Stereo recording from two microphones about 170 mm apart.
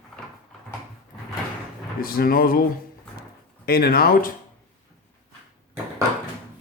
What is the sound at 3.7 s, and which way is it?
Speech, 65° left (ahead or behind).